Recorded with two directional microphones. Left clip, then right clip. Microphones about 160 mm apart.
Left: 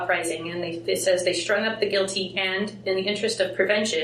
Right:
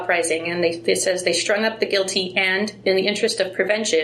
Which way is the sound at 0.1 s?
55° left (ahead or behind).